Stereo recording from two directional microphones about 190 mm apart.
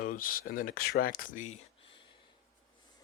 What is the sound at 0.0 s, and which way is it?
Speech, 45° left (ahead or behind).